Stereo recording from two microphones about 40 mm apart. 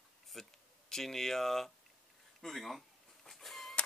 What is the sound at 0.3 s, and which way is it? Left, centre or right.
Speech, centre.